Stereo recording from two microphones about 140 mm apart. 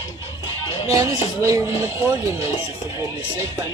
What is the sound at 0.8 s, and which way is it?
Speech, 20° right (ahead or behind).